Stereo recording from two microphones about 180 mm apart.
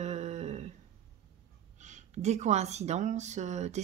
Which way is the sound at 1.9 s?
40° right (ahead or behind).